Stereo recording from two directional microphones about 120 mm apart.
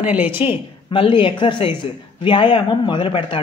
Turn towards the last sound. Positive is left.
turn(degrees=45)  # may be behind; listen again after turning